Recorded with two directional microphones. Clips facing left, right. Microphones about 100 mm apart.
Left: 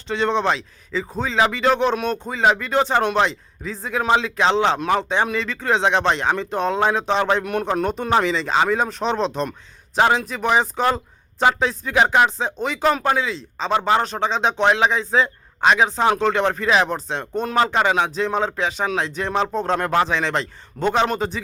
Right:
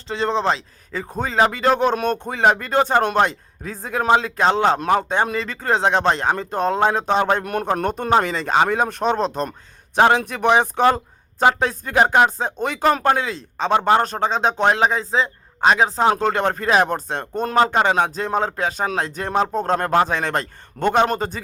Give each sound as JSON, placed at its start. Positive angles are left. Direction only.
{"t": 0.1, "sound": "speech", "side_deg": -35}
{"t": 9.9, "sound": "speech", "side_deg": -55}
{"t": 15.1, "sound": "a sound", "side_deg": -30}
{"t": 15.7, "sound": "speech", "side_deg": -40}